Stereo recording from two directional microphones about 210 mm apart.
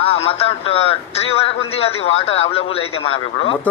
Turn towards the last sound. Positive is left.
turn(degrees=25)  # may be behind; listen again after turning